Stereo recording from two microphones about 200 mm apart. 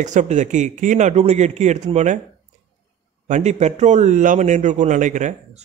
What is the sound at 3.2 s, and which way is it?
A man's voice, 35° right (ahead or behind).